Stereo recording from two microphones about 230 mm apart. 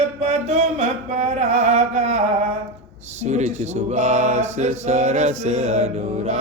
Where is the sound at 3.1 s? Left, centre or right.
Right.